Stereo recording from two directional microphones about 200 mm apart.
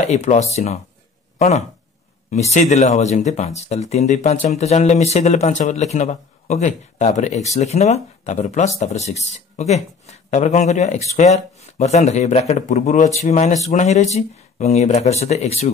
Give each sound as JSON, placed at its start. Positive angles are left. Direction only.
{"t": 0.0, "sound": "speech", "side_deg": 35}
{"t": 2.5, "sound": "speech", "side_deg": 35}